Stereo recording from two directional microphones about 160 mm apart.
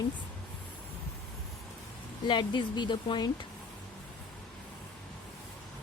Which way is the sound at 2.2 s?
30° left (ahead or behind).